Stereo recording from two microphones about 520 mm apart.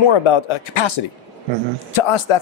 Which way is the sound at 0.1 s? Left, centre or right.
Left.